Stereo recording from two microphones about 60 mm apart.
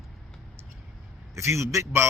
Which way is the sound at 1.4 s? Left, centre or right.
Right.